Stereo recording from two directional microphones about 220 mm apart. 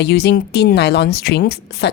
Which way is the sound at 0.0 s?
50° left (ahead or behind).